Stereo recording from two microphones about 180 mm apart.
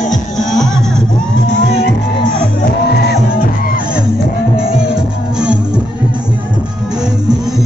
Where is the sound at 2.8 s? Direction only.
65° left (ahead or behind).